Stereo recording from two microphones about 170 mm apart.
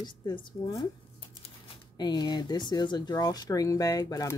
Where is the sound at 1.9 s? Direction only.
25° left (ahead or behind).